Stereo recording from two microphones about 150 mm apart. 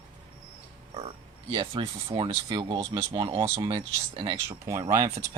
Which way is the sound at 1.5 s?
30° right (ahead or behind).